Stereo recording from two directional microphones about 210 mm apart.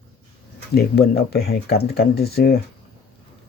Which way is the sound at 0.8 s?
50° left (ahead or behind).